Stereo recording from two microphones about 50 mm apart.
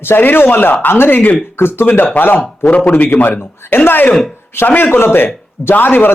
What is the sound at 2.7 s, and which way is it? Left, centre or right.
Speech, left.